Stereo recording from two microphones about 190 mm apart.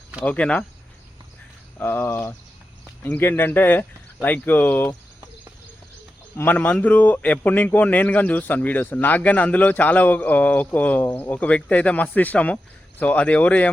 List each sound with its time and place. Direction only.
0.3 s a man's voice: 5° left (ahead or behind)
1.8 s a man's voice: 10° left (ahead or behind)
6.3 s a man's voice: 10° left (ahead or behind)